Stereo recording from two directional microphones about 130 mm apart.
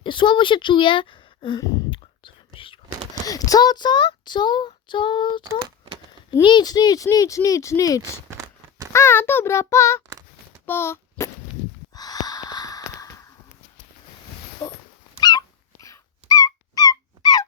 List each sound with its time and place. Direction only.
0.0 s speech: 40° left (ahead or behind)
3.2 s child singing: 30° left (ahead or behind)
5.4 s speech: 35° right (ahead or behind)
6.4 s speech: 35° left (ahead or behind)
10.7 s a sound: 20° left (ahead or behind)
11.9 s gasp: 30° left (ahead or behind)
14.6 s dog: 30° left (ahead or behind)